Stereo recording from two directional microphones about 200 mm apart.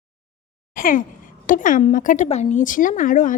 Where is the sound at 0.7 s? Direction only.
45° left (ahead or behind).